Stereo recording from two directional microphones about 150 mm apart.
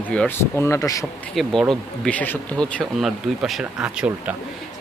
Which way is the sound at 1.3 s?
Centre (ahead or behind).